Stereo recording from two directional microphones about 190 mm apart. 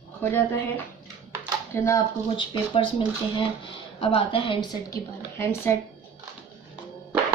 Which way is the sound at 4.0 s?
30° left (ahead or behind).